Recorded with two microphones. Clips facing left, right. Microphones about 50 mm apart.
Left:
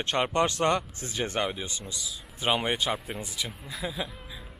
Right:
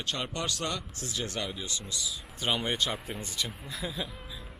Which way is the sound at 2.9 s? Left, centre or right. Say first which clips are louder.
Left 3 dB; centre.